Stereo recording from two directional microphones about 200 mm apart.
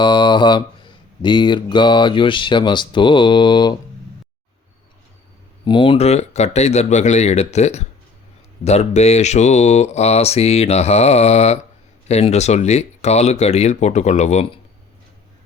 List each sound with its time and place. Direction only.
0.0 s speech: 25° left (ahead or behind)
5.6 s speech: 25° left (ahead or behind)